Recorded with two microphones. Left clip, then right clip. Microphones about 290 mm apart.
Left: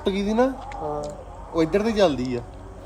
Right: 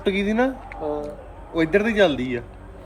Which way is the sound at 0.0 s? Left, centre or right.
Centre.